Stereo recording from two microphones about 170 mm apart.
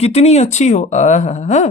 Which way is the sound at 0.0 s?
40° left (ahead or behind).